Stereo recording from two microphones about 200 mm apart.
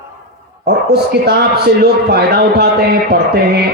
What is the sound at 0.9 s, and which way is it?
A man's voice, 55° right (ahead or behind).